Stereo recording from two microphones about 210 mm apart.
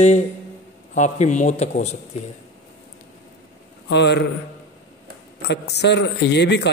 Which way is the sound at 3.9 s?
55° left (ahead or behind).